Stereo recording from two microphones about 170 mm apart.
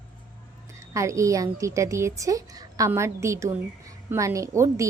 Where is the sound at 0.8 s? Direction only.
15° right (ahead or behind).